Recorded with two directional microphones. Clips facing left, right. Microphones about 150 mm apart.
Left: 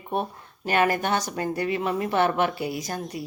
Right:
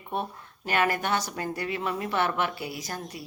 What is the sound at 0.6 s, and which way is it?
A woman's voice, 25° left (ahead or behind).